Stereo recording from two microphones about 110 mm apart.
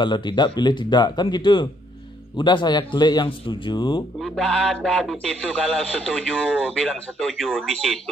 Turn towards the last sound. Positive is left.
turn(degrees=0)  # may be behind; listen again after turning